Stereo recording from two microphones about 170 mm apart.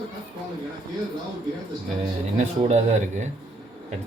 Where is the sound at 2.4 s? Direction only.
40° right (ahead or behind).